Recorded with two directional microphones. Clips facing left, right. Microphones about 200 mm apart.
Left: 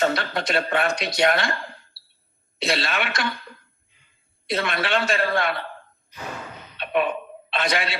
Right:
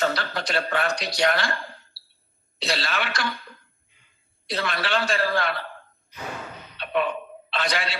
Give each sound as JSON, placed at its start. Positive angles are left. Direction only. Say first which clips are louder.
{"t": 0.0, "sound": "speech", "louder": "left 3 dB", "side_deg": 20}
{"t": 2.6, "sound": "speech", "louder": "left 3 dB", "side_deg": 25}
{"t": 4.4, "sound": "speech", "louder": "left 3 dB", "side_deg": 20}
{"t": 6.7, "sound": "a sound", "louder": "left 2 dB", "side_deg": 20}